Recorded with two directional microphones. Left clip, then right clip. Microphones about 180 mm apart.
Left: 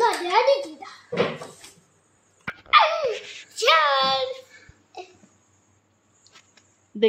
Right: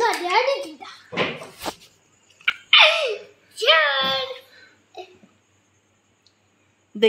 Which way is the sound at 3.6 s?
5° right (ahead or behind).